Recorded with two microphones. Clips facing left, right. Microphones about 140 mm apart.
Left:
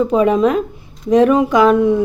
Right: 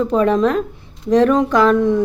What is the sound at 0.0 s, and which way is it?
A woman's voice, 5° left (ahead or behind).